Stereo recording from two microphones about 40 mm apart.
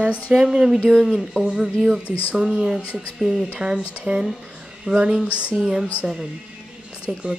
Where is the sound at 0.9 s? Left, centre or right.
Centre.